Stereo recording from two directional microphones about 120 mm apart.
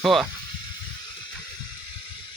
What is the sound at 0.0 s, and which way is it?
Speech, centre (ahead or behind).